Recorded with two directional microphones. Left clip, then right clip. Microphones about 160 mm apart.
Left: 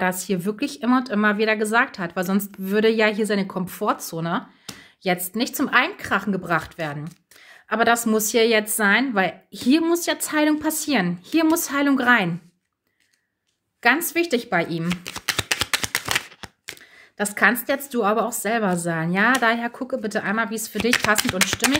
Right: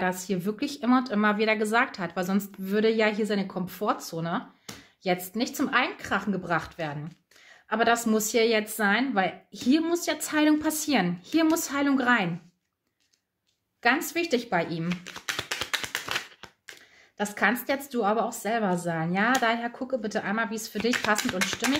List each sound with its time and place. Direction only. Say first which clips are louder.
0.0 s speech: left 5 dB; 40° left (ahead or behind)
13.8 s speech: left 5 dB; 35° left (ahead or behind)
14.9 s shuffling cards: left 6 dB; 70° left (ahead or behind)
17.2 s speech: left 6 dB; 35° left (ahead or behind)
21.2 s speech: left 7 dB; 65° left (ahead or behind)